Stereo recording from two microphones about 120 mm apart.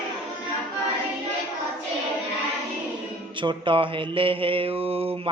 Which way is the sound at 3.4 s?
45° right (ahead or behind).